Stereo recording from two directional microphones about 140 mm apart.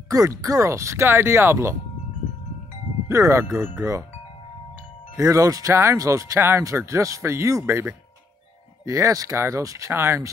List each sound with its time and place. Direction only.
0.1 s speech: 25° right (ahead or behind)
3.1 s speech: 20° right (ahead or behind)
5.1 s speech: 20° right (ahead or behind)